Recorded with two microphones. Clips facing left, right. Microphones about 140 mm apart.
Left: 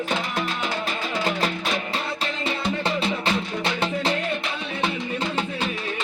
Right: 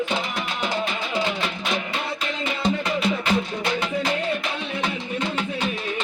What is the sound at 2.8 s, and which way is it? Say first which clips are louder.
Music: right 1 dB; 30° left (ahead or behind).